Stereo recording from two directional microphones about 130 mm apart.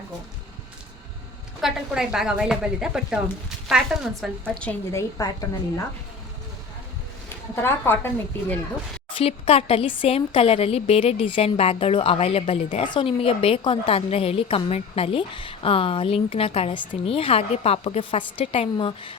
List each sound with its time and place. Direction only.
1.6 s speech: 5° right (ahead or behind)
4.9 s a woman's voice: 25° left (ahead or behind)
7.5 s a woman's voice: 20° left (ahead or behind)
9.1 s a woman's voice: 50° left (ahead or behind)
12.8 s a woman's voice: 40° left (ahead or behind)